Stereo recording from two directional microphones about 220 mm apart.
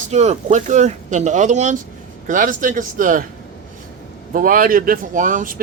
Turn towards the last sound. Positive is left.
turn(degrees=-40)  # may be behind; listen again after turning